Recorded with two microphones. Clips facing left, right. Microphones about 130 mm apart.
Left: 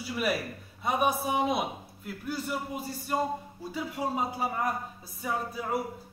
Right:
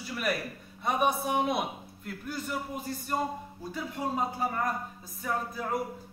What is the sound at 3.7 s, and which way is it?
A man's voice, 5° left (ahead or behind).